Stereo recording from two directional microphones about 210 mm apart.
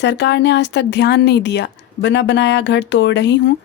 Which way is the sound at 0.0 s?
55° left (ahead or behind).